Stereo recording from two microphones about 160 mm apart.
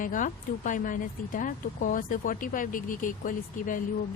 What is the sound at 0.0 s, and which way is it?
Speech, 55° left (ahead or behind).